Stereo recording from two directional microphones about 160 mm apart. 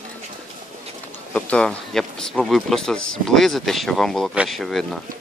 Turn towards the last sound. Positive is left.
turn(degrees=0)  # may be behind; listen again after turning